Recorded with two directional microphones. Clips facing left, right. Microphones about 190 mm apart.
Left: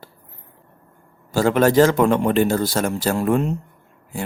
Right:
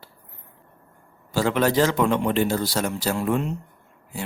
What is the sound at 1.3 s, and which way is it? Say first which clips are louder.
A man's voice: left 5 dB; 45° left (ahead or behind).